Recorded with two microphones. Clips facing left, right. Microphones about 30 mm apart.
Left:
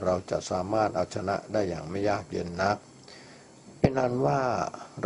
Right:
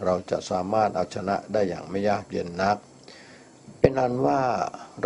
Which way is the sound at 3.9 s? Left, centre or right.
Centre.